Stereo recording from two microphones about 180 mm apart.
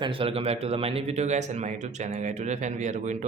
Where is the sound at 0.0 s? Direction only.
30° right (ahead or behind).